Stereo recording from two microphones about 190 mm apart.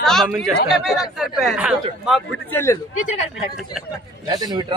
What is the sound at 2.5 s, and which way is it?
Speech, 15° left (ahead or behind).